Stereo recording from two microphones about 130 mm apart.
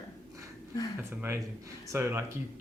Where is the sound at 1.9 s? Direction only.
20° right (ahead or behind).